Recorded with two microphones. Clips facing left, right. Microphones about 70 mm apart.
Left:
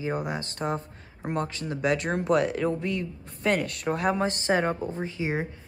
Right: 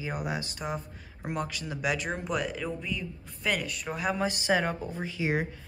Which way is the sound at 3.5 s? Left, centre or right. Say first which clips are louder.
Left 6 dB; left.